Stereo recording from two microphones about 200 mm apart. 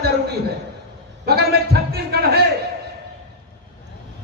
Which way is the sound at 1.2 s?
55° right (ahead or behind).